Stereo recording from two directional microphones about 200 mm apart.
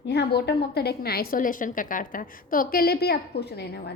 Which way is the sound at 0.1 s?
55° left (ahead or behind).